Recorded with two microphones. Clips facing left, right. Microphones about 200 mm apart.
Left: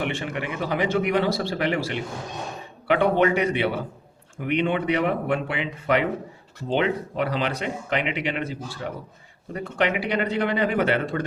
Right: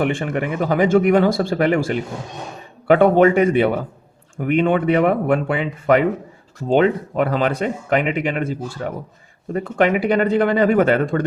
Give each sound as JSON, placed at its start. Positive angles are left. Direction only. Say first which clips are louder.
{"t": 0.0, "sound": "speech", "louder": "right 7 dB", "side_deg": -50}